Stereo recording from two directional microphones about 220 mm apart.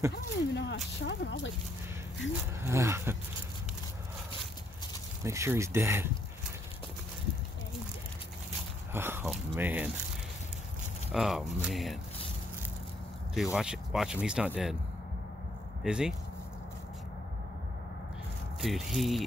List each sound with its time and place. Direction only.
0.1 s speech: 50° left (ahead or behind)
2.6 s speech: 10° right (ahead or behind)
5.2 s speech: 10° right (ahead or behind)
8.9 s speech: 10° right (ahead or behind)
11.1 s speech: centre (ahead or behind)
13.3 s speech: centre (ahead or behind)
15.8 s speech: 5° right (ahead or behind)
18.6 s speech: centre (ahead or behind)